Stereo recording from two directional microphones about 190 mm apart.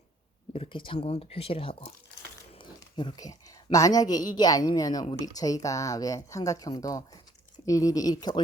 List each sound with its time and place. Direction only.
0.5 s speech: 30° left (ahead or behind)
2.6 s a sound: 25° left (ahead or behind)
4.4 s speech: 20° left (ahead or behind)